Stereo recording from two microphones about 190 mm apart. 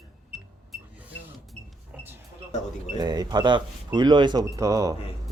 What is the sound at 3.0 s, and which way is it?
Speech, 20° right (ahead or behind).